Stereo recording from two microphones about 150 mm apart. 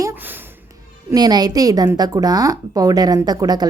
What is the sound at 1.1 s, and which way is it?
A woman's voice, 25° right (ahead or behind).